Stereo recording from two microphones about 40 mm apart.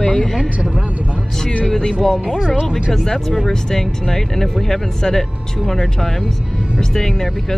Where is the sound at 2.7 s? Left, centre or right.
Centre.